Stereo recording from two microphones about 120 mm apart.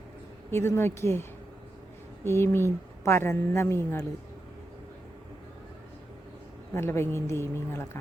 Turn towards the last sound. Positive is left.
turn(degrees=20)  # may be behind; listen again after turning